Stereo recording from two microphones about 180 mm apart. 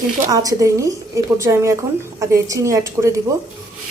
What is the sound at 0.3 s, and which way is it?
A woman's voice, 20° right (ahead or behind).